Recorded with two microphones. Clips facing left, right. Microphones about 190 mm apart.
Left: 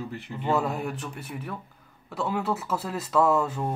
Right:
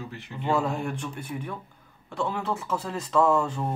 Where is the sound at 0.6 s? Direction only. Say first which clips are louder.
Right 1 dB; 5° left (ahead or behind).